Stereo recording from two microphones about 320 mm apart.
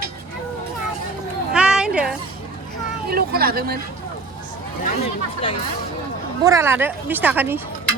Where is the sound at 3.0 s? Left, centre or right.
Right.